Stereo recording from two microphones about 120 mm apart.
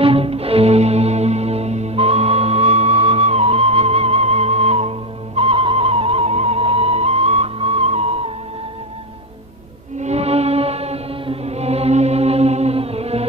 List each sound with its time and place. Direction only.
0.0 s music: 55° right (ahead or behind)
9.9 s music: 65° right (ahead or behind)